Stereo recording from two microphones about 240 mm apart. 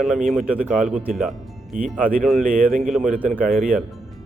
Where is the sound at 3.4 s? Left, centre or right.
Right.